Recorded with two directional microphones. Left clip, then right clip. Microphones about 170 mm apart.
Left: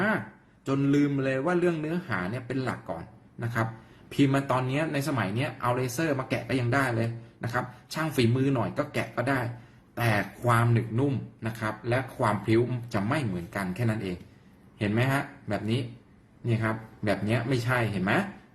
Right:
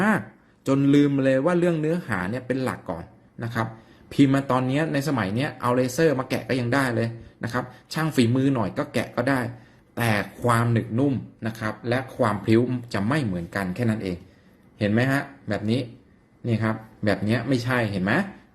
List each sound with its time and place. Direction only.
0.6 s speech: 40° right (ahead or behind)
10.7 s speech: 25° right (ahead or behind)